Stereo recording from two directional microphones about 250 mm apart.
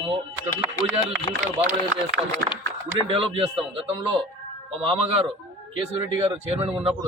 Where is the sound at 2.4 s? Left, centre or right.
Right.